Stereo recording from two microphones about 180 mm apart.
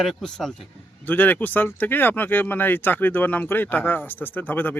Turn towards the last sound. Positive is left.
turn(degrees=10)  # may be behind; listen again after turning